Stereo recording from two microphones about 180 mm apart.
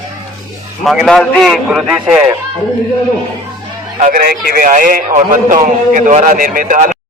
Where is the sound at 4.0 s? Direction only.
50° right (ahead or behind).